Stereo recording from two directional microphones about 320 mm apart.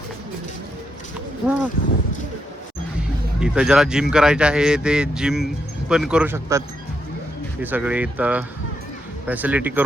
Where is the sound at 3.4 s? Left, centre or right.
Centre.